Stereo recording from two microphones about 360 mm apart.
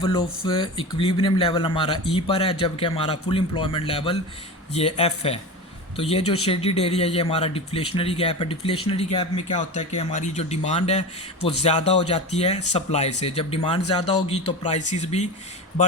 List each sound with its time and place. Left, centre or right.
0.0 s speech: centre